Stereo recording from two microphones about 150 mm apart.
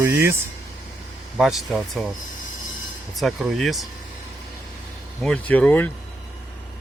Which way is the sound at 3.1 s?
Centre (ahead or behind).